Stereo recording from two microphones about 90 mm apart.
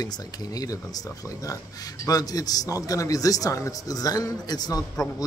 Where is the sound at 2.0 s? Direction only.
40° left (ahead or behind).